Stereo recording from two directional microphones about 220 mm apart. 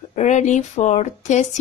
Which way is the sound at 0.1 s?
35° left (ahead or behind).